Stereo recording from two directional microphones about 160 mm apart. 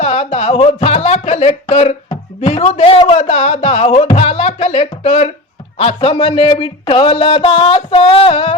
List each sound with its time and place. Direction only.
0.0 s speech: 40° left (ahead or behind)